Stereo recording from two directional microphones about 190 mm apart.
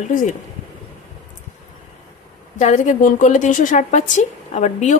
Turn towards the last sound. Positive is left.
turn(degrees=40)  # may be behind; listen again after turning